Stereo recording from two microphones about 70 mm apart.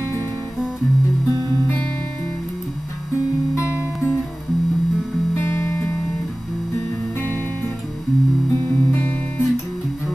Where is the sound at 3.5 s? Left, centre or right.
Right.